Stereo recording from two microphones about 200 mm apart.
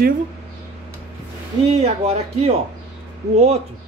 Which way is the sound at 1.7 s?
30° right (ahead or behind).